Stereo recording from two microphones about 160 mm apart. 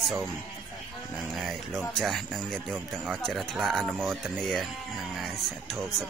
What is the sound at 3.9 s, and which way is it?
Speech, 15° right (ahead or behind).